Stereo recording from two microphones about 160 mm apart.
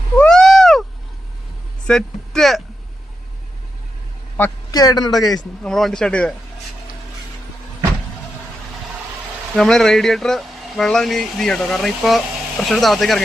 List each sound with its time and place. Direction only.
0.2 s owl: 5° left (ahead or behind)
1.9 s speech: 5° left (ahead or behind)
4.4 s a man's voice: 10° left (ahead or behind)
4.7 s a man's voice: 25° left (ahead or behind)
5.1 s speech: centre (ahead or behind)
9.6 s speech: 5° left (ahead or behind)